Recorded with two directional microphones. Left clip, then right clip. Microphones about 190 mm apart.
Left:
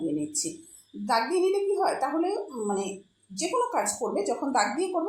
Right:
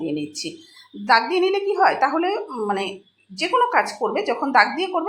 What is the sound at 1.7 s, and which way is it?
Speech, 25° right (ahead or behind).